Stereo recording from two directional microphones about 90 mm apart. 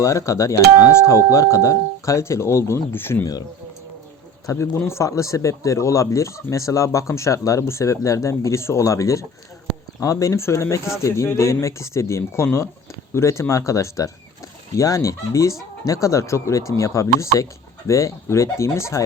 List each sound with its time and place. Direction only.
0.0 s speech: 35° left (ahead or behind)
4.4 s a man's voice: 30° left (ahead or behind)